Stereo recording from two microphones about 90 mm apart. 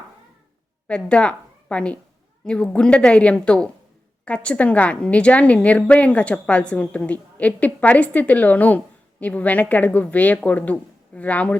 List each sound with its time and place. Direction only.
0.9 s a woman's voice: 10° left (ahead or behind)